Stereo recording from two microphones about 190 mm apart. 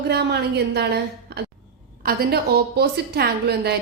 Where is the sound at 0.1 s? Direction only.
60° right (ahead or behind).